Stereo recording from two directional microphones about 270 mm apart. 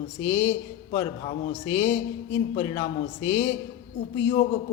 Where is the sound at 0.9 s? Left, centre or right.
Centre.